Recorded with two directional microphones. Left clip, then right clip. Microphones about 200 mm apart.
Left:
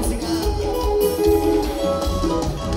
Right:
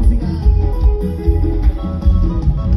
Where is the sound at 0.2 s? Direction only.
25° left (ahead or behind).